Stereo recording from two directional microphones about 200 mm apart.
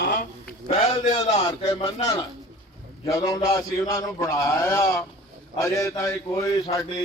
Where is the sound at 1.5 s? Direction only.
20° left (ahead or behind).